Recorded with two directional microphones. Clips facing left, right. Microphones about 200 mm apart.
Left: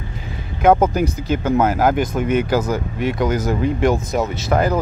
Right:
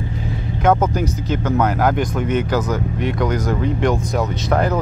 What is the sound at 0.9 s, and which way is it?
Speech, 10° left (ahead or behind).